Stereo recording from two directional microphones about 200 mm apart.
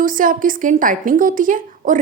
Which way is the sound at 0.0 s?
45° right (ahead or behind).